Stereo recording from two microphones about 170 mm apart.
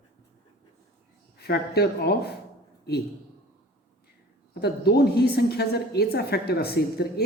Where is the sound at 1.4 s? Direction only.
70° left (ahead or behind).